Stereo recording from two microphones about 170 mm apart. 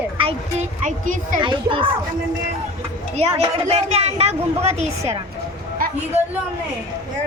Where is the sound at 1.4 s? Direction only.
30° right (ahead or behind).